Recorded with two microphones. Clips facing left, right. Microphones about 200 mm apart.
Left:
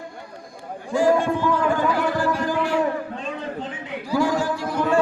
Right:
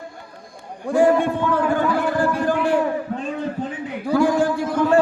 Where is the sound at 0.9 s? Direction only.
55° right (ahead or behind).